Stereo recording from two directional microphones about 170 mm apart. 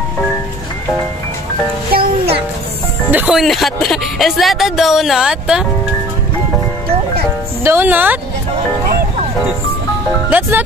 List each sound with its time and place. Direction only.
1.9 s music: 65° right (ahead or behind)
3.1 s speech: 5° right (ahead or behind)
7.6 s speech: 10° right (ahead or behind)